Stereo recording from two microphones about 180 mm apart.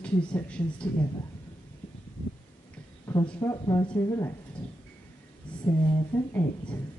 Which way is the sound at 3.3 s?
20° left (ahead or behind).